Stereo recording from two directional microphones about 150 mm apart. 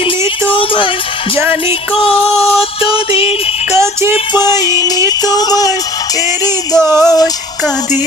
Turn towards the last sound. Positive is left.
turn(degrees=25)  # may be behind; listen again after turning